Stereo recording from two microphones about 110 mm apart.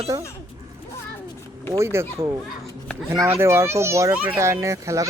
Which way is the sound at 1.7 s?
25° right (ahead or behind).